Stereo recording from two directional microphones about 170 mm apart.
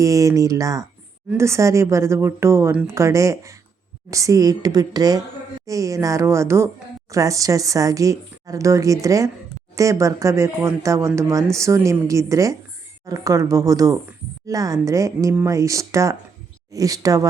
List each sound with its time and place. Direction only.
0.0 s a woman's voice: 20° right (ahead or behind)